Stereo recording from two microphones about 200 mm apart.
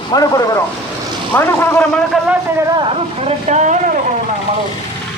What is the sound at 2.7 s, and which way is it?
Speech, 30° right (ahead or behind).